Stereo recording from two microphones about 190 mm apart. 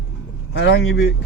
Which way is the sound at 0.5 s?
75° left (ahead or behind).